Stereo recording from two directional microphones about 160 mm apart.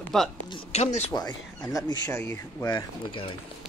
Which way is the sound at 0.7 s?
40° left (ahead or behind).